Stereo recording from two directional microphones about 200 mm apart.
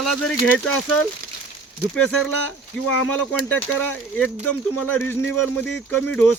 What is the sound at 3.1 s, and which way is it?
Speech, 10° left (ahead or behind).